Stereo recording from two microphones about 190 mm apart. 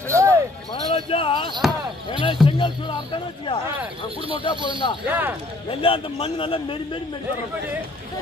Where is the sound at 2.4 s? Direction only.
25° left (ahead or behind).